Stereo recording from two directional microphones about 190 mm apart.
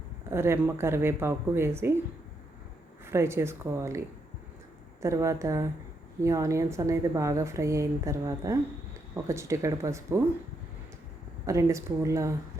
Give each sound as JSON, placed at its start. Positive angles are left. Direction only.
{"t": 0.3, "sound": "a woman's voice", "side_deg": -15}
{"t": 3.1, "sound": "a woman's voice", "side_deg": -15}
{"t": 5.0, "sound": "a woman's voice", "side_deg": -15}
{"t": 11.4, "sound": "a woman's voice", "side_deg": -15}